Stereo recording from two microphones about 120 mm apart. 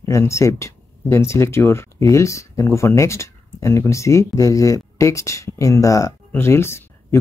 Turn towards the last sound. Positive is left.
turn(degrees=20)  # may be behind; listen again after turning